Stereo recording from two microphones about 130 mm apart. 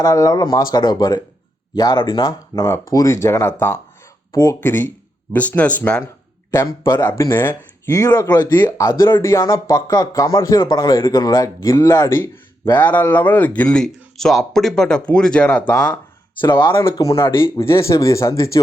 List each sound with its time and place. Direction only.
0.0 s speech: 25° left (ahead or behind)
7.1 s speech: 35° left (ahead or behind)
7.3 s speech: 20° left (ahead or behind)
16.4 s speech: 40° left (ahead or behind)
17.0 s speech: 25° left (ahead or behind)